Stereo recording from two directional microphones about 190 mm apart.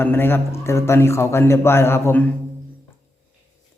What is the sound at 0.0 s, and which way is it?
A man's voice, 10° left (ahead or behind).